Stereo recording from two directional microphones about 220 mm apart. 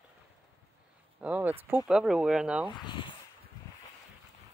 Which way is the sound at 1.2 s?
5° right (ahead or behind).